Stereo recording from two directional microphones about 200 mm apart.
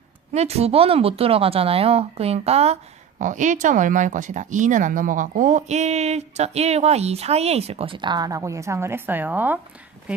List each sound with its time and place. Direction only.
0.3 s a woman's voice: 30° right (ahead or behind); by 9.6 s 10° right (ahead or behind)